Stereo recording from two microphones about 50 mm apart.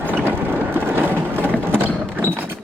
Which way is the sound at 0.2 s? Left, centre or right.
Right.